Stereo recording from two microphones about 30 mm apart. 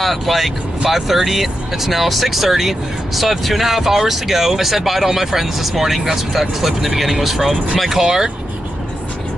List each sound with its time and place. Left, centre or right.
0.0 s speech: centre
8.0 s speech: centre